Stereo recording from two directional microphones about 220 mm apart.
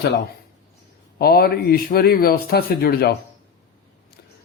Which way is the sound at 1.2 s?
45° left (ahead or behind).